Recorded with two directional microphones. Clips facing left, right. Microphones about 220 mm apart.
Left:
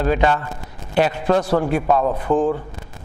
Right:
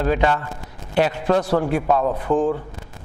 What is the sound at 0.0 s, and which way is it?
A man's voice, 20° left (ahead or behind).